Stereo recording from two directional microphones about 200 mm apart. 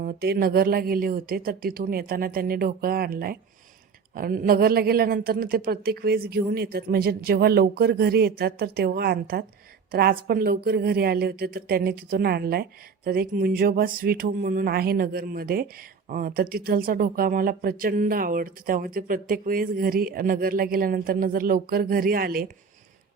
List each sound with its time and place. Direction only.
0.0 s speech: 50° right (ahead or behind)